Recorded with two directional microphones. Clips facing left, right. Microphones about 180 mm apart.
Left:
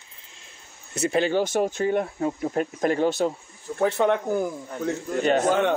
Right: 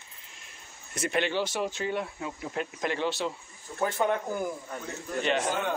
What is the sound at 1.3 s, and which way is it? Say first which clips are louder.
Speech: left 7 dB; 45° left (ahead or behind).